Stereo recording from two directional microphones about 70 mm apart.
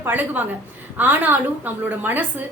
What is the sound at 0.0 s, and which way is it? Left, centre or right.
A woman's voice, right.